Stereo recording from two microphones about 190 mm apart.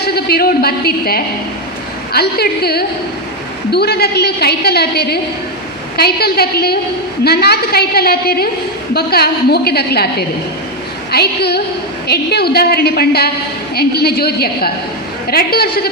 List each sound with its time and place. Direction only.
0.0 s a woman's voice: 55° left (ahead or behind)